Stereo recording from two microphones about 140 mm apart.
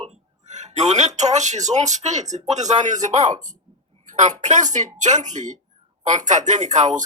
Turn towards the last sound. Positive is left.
turn(degrees=-60)  # may be behind; listen again after turning